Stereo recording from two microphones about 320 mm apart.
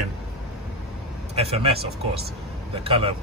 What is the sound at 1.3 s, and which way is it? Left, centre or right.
Speech, centre.